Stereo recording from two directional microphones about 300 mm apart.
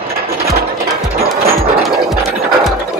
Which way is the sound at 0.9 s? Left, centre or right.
Centre.